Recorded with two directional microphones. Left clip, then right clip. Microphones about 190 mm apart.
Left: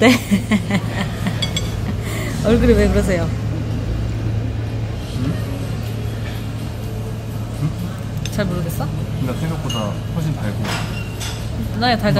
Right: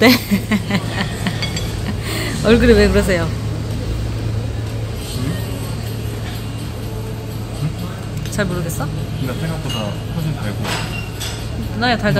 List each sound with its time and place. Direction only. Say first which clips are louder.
0.0 s a sound: right 1 dB; 5° left (ahead or behind)
2.1 s speech: right 3 dB; 5° right (ahead or behind)
8.4 s speech: right 2 dB; centre (ahead or behind)
11.8 s speech: even; 5° left (ahead or behind)